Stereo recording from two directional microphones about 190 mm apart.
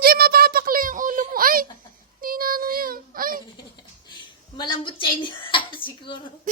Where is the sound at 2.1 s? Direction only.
50° right (ahead or behind).